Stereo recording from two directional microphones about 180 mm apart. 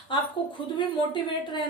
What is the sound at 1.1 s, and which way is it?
Speech, 25° left (ahead or behind).